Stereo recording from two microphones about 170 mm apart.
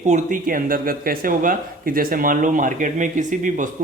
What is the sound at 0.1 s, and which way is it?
Speech, 55° right (ahead or behind).